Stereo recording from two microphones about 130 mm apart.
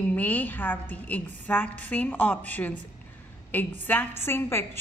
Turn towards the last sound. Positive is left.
turn(degrees=20)  # may be behind; listen again after turning